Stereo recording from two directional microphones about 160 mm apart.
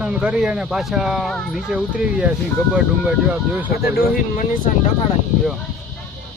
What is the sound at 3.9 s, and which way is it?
Speech, 55° left (ahead or behind).